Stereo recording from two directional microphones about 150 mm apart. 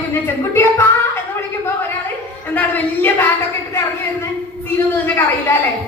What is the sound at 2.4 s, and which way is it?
Speech, 10° left (ahead or behind).